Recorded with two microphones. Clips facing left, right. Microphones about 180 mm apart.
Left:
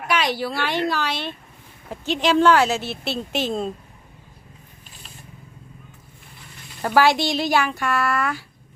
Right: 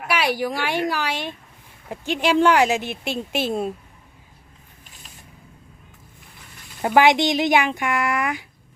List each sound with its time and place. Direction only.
0.1 s speech: 10° right (ahead or behind)
6.8 s speech: 20° right (ahead or behind)